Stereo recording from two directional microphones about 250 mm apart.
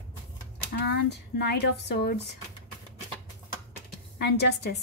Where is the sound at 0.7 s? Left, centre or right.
Left.